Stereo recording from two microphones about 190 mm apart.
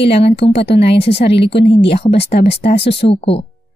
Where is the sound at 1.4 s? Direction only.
65° left (ahead or behind).